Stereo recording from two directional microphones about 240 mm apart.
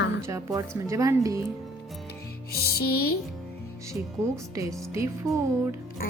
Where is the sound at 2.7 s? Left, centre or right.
Left.